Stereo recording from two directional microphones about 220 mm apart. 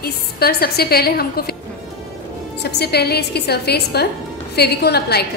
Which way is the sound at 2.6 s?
50° left (ahead or behind).